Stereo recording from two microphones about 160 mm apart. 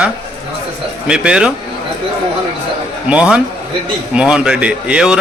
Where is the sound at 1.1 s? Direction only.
5° right (ahead or behind).